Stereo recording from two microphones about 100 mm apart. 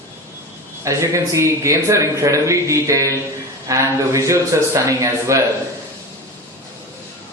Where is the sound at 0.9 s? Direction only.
30° right (ahead or behind).